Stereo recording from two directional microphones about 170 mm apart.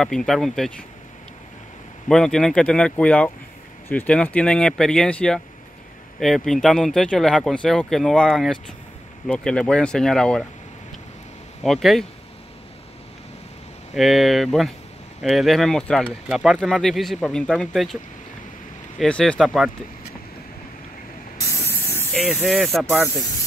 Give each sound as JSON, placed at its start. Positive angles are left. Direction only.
{"t": 0.0, "sound": "speech", "side_deg": 0}
{"t": 2.0, "sound": "speech", "side_deg": 5}
{"t": 11.6, "sound": "speech", "side_deg": 0}
{"t": 13.9, "sound": "speech", "side_deg": 0}
{"t": 18.9, "sound": "speech", "side_deg": 5}
{"t": 21.5, "sound": "spray", "side_deg": 15}
{"t": 22.1, "sound": "speech", "side_deg": 5}